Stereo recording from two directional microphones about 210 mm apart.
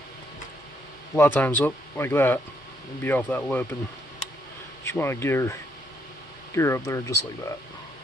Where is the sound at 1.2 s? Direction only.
10° left (ahead or behind).